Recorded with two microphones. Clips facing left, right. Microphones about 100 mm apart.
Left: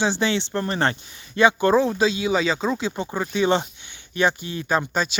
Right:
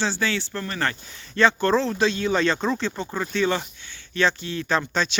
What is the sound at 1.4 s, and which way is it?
Speech, 15° left (ahead or behind).